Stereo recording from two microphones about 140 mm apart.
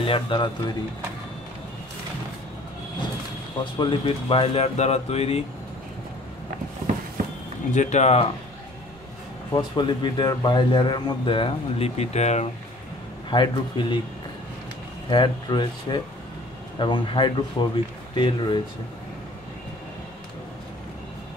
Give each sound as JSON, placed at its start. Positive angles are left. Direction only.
{"t": 0.0, "sound": "speech", "side_deg": 40}
{"t": 3.7, "sound": "speech", "side_deg": 35}
{"t": 7.7, "sound": "speech", "side_deg": 60}
{"t": 9.5, "sound": "speech", "side_deg": 35}
{"t": 13.3, "sound": "speech", "side_deg": 35}
{"t": 15.0, "sound": "speech", "side_deg": 30}